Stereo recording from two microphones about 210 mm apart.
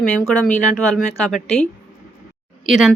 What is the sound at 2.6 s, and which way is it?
Speech, centre (ahead or behind).